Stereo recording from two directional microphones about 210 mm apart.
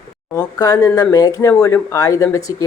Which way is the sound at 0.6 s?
20° left (ahead or behind).